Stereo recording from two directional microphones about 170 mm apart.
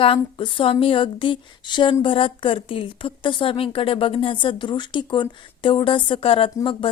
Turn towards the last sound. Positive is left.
turn(degrees=30)  # may be behind; listen again after turning